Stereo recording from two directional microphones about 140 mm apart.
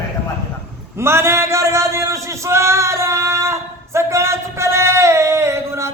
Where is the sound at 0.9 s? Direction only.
20° right (ahead or behind).